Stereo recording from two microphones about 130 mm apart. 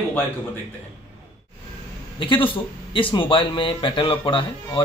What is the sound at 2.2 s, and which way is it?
A man's voice, 40° left (ahead or behind).